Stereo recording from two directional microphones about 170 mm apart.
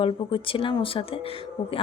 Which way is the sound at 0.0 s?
30° left (ahead or behind).